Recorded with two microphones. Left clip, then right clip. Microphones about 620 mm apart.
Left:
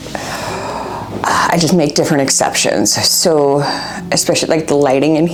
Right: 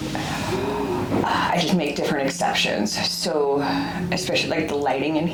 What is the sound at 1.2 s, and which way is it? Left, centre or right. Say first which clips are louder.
A woman's voice: left 11 dB; left.